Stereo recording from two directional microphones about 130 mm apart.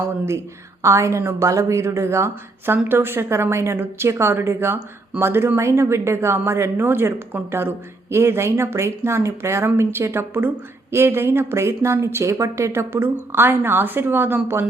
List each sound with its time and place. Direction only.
0.8 s a woman's voice: 20° right (ahead or behind)